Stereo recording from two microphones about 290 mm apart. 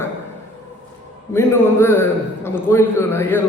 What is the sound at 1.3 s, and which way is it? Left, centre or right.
A man's voice, centre.